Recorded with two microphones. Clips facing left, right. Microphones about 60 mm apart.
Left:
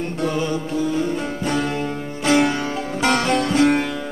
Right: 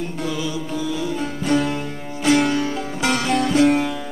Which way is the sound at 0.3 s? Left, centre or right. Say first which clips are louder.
Left 3 dB; left.